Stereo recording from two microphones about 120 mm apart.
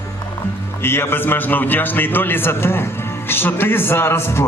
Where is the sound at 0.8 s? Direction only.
20° left (ahead or behind).